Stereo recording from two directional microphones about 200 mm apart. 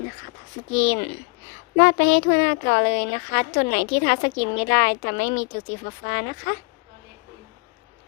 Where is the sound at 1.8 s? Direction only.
45° left (ahead or behind).